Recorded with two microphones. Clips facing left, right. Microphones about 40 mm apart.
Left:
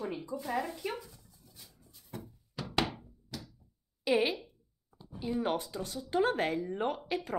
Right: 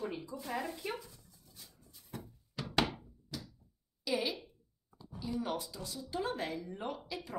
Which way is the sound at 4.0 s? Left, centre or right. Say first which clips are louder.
Left 6 dB; left.